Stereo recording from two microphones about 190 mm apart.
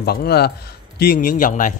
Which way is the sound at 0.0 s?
55° left (ahead or behind).